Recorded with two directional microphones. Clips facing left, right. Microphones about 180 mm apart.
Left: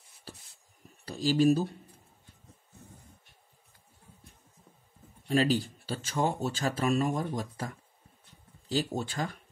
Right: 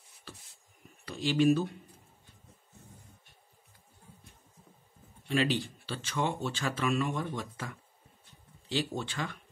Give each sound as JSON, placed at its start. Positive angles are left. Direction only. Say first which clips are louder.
{"t": 1.0, "sound": "speech", "louder": "left 2 dB", "side_deg": 40}
{"t": 5.3, "sound": "speech", "louder": "left 3 dB", "side_deg": 40}